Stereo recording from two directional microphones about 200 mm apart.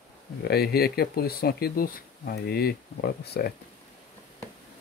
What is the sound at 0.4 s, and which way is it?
Speech, 55° left (ahead or behind).